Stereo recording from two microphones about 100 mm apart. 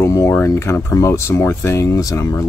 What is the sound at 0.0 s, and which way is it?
Speech, 30° left (ahead or behind).